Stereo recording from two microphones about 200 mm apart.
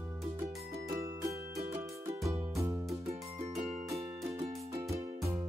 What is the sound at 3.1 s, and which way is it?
Music, 30° right (ahead or behind).